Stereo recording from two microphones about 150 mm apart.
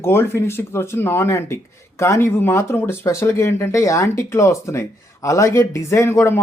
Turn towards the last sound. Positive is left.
turn(degrees=15)  # may be behind; listen again after turning